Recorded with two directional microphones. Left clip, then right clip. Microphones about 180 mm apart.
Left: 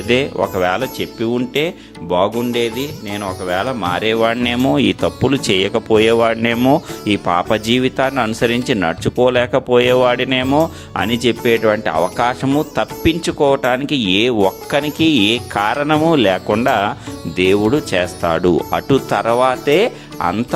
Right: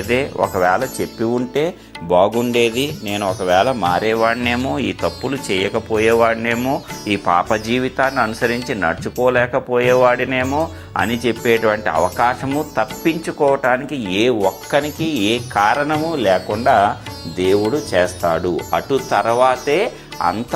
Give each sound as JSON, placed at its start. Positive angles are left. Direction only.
{"t": 0.1, "sound": "speech", "side_deg": 45}
{"t": 0.6, "sound": "speech", "side_deg": 20}
{"t": 2.0, "sound": "speech", "side_deg": 0}
{"t": 4.0, "sound": "speech", "side_deg": 40}
{"t": 4.4, "sound": "speech", "side_deg": 55}
{"t": 7.1, "sound": "speech", "side_deg": 40}
{"t": 14.4, "sound": "speech", "side_deg": 60}
{"t": 16.6, "sound": "speech", "side_deg": 30}
{"t": 18.3, "sound": "speech", "side_deg": 55}
{"t": 19.1, "sound": "speech", "side_deg": 70}
{"t": 20.2, "sound": "speech", "side_deg": 40}